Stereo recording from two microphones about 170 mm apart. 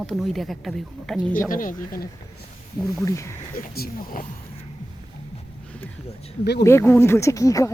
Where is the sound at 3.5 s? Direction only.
60° left (ahead or behind).